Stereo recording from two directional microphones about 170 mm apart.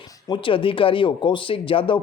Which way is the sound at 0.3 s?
30° left (ahead or behind).